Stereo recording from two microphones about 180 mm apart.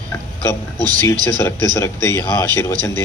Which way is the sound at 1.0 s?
10° left (ahead or behind).